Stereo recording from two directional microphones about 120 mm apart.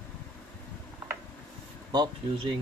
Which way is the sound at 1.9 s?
40° right (ahead or behind).